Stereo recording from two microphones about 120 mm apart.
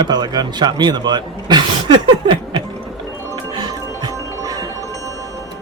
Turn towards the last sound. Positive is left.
turn(degrees=-30)  # may be behind; listen again after turning